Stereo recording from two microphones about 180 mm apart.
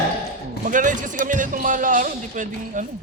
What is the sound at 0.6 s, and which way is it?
Speech, 45° right (ahead or behind).